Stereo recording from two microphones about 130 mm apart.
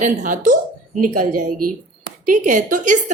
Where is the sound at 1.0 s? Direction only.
90° right.